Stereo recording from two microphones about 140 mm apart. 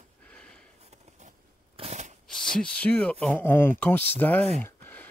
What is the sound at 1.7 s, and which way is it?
Shuffling cards, 50° right (ahead or behind).